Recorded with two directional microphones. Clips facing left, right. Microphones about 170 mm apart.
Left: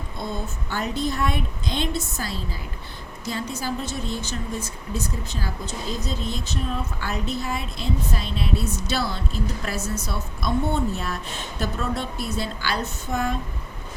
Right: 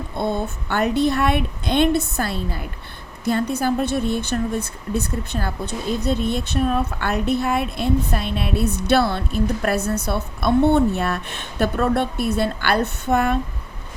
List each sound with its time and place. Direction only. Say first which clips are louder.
0.2 s a woman's voice: right 8 dB; 60° right (ahead or behind)